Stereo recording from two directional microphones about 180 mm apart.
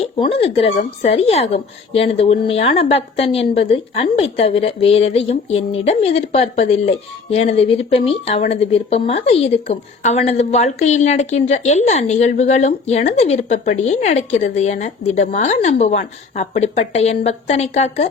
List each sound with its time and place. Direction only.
0.0 s speech: 30° left (ahead or behind)